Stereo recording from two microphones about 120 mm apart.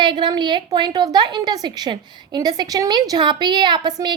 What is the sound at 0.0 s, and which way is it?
A woman's voice, 40° right (ahead or behind).